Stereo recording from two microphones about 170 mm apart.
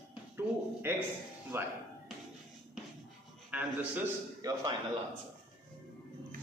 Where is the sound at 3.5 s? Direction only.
10° right (ahead or behind).